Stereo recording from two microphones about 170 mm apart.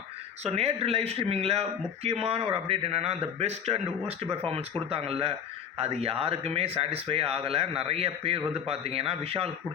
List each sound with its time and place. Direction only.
0.4 s a man's voice: 35° right (ahead or behind)